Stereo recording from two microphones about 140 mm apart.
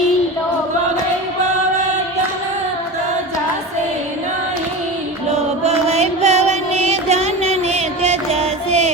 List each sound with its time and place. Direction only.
5.6 s music: 50° right (ahead or behind)